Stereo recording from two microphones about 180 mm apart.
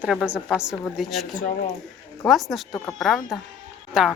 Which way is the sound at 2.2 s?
Centre (ahead or behind).